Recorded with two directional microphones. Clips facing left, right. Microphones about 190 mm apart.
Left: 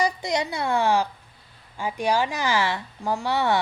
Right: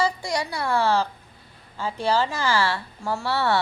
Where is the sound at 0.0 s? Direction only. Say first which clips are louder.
Left 1 dB; 20° left (ahead or behind).